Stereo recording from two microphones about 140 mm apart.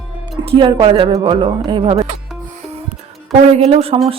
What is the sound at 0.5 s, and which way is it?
Speech, 35° right (ahead or behind).